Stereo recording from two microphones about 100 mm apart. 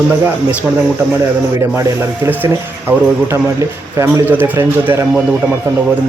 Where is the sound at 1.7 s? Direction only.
25° right (ahead or behind).